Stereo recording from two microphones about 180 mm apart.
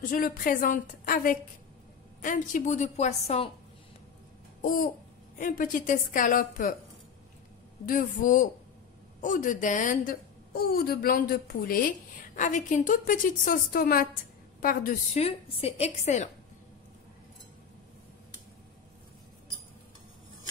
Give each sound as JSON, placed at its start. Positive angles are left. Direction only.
{"t": 0.0, "sound": "a woman's voice", "side_deg": 50}
{"t": 4.6, "sound": "babbling", "side_deg": 50}
{"t": 5.4, "sound": "a woman's voice", "side_deg": 50}
{"t": 7.8, "sound": "a woman's voice", "side_deg": 50}
{"t": 15.2, "sound": "a woman's voice", "side_deg": 35}